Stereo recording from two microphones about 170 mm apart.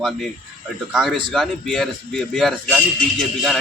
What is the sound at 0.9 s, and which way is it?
A man's voice, centre (ahead or behind).